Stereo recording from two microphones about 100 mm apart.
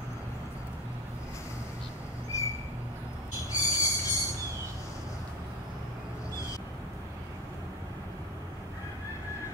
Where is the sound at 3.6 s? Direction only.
35° left (ahead or behind).